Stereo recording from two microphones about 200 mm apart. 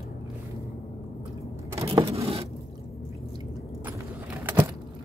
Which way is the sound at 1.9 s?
25° right (ahead or behind).